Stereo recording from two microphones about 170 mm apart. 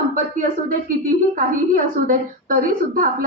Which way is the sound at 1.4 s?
50° right (ahead or behind).